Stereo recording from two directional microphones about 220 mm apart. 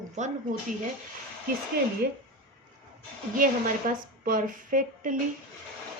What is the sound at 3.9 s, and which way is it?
A woman's voice, 35° right (ahead or behind).